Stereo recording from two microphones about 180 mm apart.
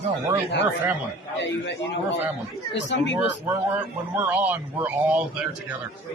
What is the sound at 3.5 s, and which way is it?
A man's voice, 10° right (ahead or behind).